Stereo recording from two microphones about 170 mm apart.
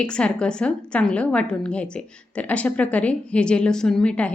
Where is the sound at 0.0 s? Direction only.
5° left (ahead or behind).